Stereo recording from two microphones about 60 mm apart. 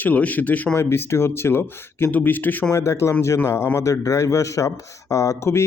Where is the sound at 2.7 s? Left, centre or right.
Left.